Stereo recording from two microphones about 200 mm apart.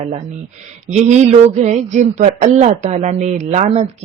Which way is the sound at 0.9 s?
35° right (ahead or behind).